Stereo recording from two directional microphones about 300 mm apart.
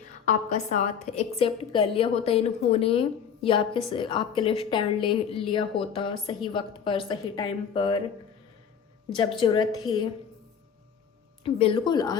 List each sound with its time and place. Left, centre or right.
0.5 s a woman's voice: left
9.4 s a woman's voice: centre
11.4 s a woman's voice: centre